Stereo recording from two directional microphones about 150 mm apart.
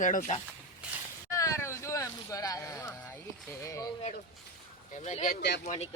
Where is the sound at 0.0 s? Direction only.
60° left (ahead or behind).